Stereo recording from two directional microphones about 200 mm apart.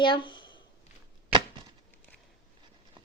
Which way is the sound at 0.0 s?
25° left (ahead or behind).